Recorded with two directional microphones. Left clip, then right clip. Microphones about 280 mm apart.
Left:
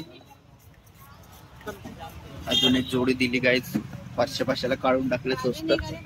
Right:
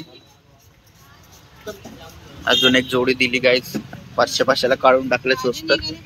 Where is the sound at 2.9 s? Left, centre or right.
Centre.